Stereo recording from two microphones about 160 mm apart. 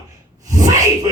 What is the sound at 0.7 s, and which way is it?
Speech, 20° right (ahead or behind).